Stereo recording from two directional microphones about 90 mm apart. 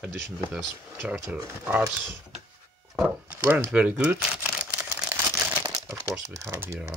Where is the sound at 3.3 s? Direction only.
20° right (ahead or behind).